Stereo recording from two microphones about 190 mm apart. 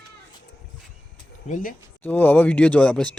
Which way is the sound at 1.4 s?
40° left (ahead or behind).